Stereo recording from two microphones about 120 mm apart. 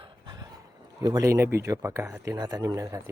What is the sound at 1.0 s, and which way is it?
Speech, 35° right (ahead or behind).